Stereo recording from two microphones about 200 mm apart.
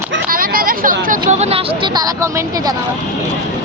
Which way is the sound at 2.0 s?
15° right (ahead or behind).